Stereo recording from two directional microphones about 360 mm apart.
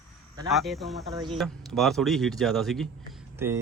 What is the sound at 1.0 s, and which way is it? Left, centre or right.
Speech, centre.